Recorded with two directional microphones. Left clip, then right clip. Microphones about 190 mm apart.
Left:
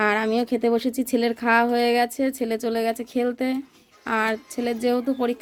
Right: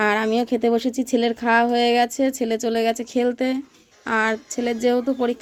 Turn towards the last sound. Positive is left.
turn(degrees=0)  # may be behind; listen again after turning